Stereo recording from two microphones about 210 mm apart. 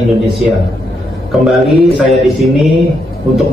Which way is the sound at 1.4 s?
Centre (ahead or behind).